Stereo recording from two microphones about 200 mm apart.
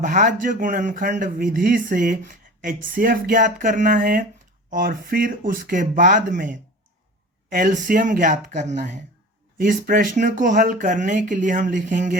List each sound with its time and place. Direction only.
0.0 s speech: 40° right (ahead or behind)